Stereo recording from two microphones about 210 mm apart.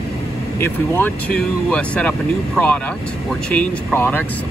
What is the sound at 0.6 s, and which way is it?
Speech, 10° left (ahead or behind).